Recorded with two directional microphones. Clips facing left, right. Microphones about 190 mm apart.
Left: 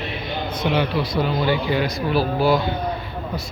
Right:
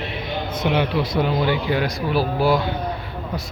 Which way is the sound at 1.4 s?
10° right (ahead or behind).